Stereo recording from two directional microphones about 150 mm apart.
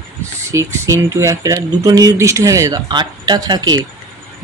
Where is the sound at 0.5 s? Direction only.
20° right (ahead or behind).